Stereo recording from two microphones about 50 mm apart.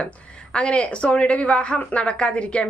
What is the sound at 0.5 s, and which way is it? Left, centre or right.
Speech, left.